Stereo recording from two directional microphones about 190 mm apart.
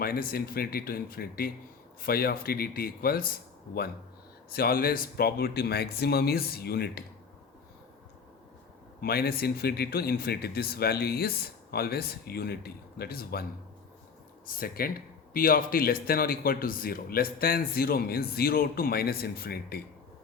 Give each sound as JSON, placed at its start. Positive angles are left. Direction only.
{"t": 0.0, "sound": "speech", "side_deg": 50}
{"t": 4.5, "sound": "speech", "side_deg": 50}
{"t": 9.0, "sound": "speech", "side_deg": 55}
{"t": 14.4, "sound": "speech", "side_deg": 50}